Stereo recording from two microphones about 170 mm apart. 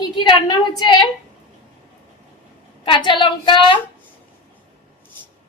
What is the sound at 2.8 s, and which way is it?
Speech, 30° left (ahead or behind).